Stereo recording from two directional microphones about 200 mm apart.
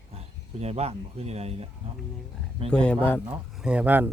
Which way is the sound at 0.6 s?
30° right (ahead or behind).